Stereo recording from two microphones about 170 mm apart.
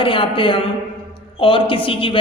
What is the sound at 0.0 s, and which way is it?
A man's voice, 30° left (ahead or behind).